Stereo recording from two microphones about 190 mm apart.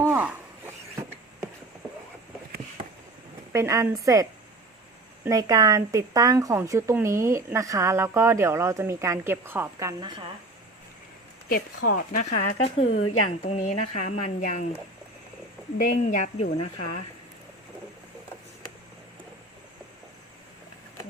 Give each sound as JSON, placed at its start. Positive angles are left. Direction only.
{"t": 0.0, "sound": "zipper", "side_deg": -10}
{"t": 3.5, "sound": "speech", "side_deg": -15}
{"t": 11.4, "sound": "speech", "side_deg": 50}
{"t": 15.8, "sound": "speech", "side_deg": 40}